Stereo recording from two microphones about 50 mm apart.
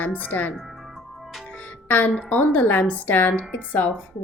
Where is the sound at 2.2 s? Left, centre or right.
Left.